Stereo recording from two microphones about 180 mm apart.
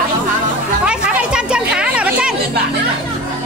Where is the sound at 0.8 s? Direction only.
5° right (ahead or behind).